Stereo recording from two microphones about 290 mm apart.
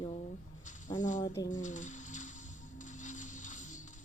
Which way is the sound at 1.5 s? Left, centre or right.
Left.